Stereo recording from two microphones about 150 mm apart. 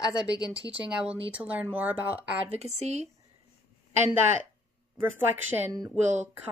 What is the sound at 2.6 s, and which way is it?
Speech, 50° right (ahead or behind).